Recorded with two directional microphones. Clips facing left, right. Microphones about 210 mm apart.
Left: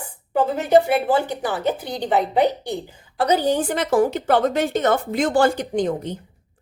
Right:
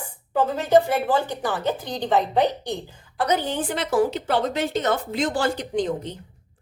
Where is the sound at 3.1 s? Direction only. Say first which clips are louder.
Left 5 dB; 30° left (ahead or behind).